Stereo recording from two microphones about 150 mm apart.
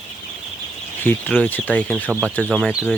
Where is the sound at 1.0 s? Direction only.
10° left (ahead or behind).